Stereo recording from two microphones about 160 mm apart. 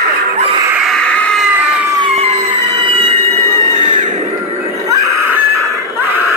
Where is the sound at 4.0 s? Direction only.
50° right (ahead or behind).